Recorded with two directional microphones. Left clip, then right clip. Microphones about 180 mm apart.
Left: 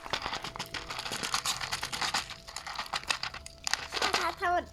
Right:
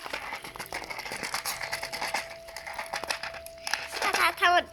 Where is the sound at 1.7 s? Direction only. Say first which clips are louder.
Right 1 dB; 30° left (ahead or behind).